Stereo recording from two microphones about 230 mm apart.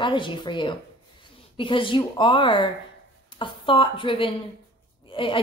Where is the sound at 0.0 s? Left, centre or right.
Left.